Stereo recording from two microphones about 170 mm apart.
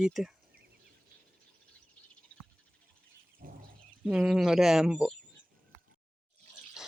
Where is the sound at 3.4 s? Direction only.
55° right (ahead or behind).